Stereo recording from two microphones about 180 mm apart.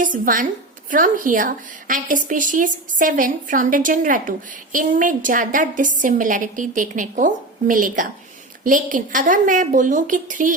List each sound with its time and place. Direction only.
0.0 s a woman's voice: 45° right (ahead or behind)